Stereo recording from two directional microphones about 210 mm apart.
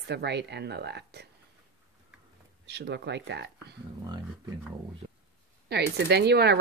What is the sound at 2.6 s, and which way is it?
Speech, 55° right (ahead or behind).